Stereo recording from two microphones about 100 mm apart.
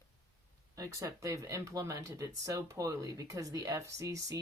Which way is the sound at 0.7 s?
35° right (ahead or behind).